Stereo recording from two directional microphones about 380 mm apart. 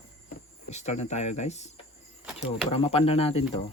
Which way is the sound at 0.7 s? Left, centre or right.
Centre.